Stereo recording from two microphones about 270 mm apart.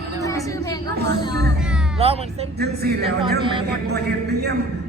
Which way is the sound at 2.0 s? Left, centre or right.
Right.